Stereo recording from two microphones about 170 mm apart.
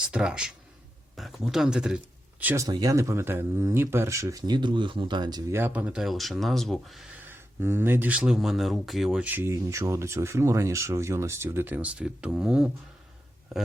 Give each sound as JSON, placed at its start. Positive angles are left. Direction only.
{"t": 0.0, "sound": "speech", "side_deg": -5}
{"t": 7.3, "sound": "speech", "side_deg": -15}